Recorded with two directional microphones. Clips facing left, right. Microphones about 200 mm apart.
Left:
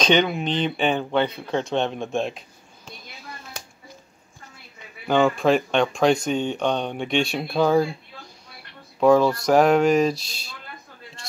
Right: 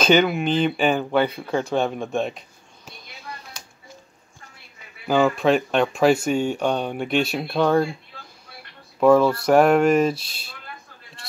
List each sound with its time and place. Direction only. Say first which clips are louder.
0.0 s speech: right 2 dB; 5° right (ahead or behind)
5.0 s speech: even; 5° right (ahead or behind)
9.0 s speech: right 1 dB; 5° right (ahead or behind)